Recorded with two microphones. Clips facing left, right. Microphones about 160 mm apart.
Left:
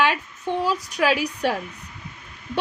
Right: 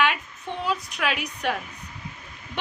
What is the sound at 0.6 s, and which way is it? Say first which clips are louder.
Speech: left 4 dB; 35° left (ahead or behind).